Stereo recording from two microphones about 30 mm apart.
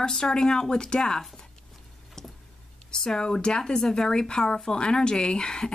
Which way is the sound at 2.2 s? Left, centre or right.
Centre.